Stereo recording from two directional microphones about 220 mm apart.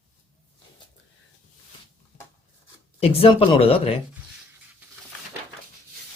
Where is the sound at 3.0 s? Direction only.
25° left (ahead or behind).